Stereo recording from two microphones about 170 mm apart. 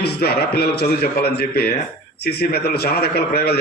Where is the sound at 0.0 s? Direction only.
70° left (ahead or behind).